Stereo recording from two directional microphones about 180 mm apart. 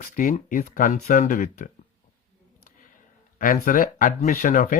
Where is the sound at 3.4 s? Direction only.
50° left (ahead or behind).